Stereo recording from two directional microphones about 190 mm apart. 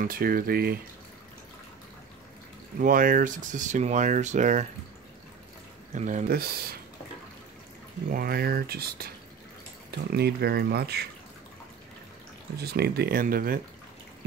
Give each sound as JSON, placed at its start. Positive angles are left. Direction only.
{"t": 0.0, "sound": "speech", "side_deg": -50}
{"t": 2.8, "sound": "speech", "side_deg": -45}
{"t": 5.9, "sound": "speech", "side_deg": -40}
{"t": 8.1, "sound": "speech", "side_deg": -50}
{"t": 12.5, "sound": "speech", "side_deg": -55}